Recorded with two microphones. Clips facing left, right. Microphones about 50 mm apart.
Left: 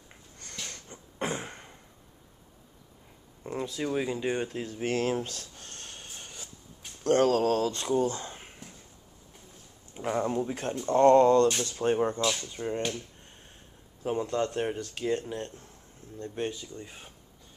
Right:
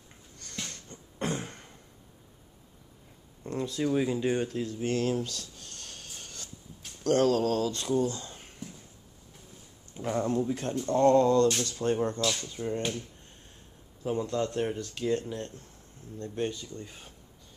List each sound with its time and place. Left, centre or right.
0.8 s a sound: centre
3.4 s speech: centre
4.5 s a sound: left
7.2 s speech: left
9.9 s speech: centre
10.9 s speech: left
11.4 s speech: centre
14.0 s speech: centre